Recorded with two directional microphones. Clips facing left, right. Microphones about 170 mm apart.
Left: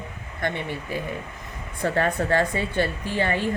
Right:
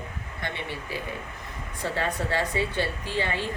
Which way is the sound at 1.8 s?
50° left (ahead or behind).